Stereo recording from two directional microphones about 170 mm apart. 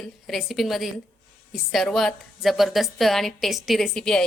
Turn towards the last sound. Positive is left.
turn(degrees=5)  # may be behind; listen again after turning